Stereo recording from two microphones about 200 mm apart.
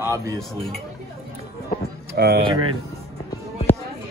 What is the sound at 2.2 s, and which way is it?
Speech, 50° right (ahead or behind).